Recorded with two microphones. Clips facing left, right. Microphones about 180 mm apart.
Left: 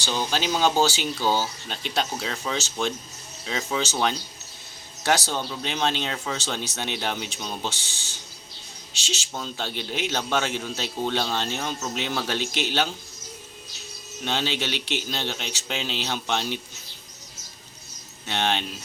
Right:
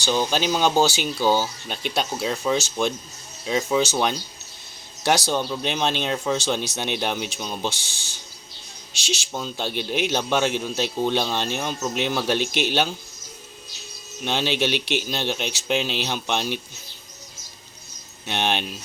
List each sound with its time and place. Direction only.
0.0 s a man's voice: 15° right (ahead or behind)
14.3 s a man's voice: 15° right (ahead or behind)
18.3 s a man's voice: 15° right (ahead or behind)